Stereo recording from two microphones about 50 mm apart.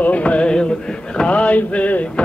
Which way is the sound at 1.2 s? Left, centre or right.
Left.